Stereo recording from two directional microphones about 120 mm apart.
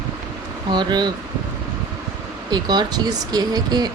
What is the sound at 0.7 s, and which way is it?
Speech, 40° right (ahead or behind).